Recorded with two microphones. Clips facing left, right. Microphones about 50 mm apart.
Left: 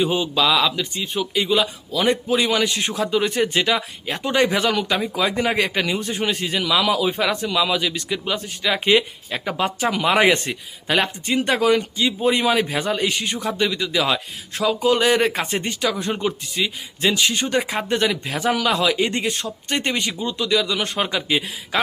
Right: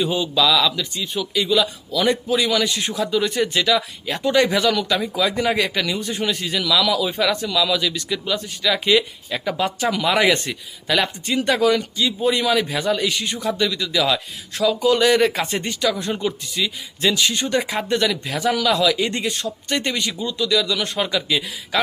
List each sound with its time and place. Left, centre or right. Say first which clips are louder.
0.0 s a man's voice: even; left
17.9 s a man's voice: even; left